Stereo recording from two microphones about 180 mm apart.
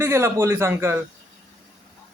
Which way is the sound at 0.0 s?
15° right (ahead or behind).